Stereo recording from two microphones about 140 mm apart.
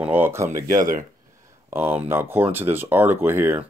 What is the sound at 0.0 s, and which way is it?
Speech, 15° right (ahead or behind).